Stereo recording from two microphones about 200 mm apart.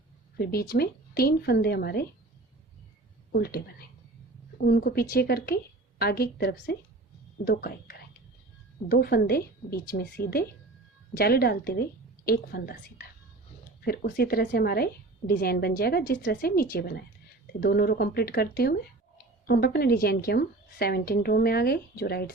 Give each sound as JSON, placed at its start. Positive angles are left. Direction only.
{"t": 0.3, "sound": "speech", "side_deg": 50}
{"t": 3.3, "sound": "speech", "side_deg": 50}
{"t": 13.8, "sound": "speech", "side_deg": 50}